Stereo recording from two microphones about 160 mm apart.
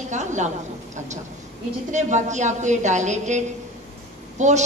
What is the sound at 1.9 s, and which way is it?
A woman's voice, 50° right (ahead or behind).